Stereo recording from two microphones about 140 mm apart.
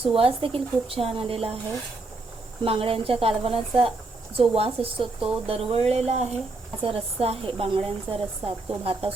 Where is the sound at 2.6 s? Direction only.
45° right (ahead or behind).